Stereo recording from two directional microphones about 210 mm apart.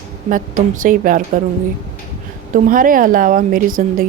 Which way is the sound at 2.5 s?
40° right (ahead or behind).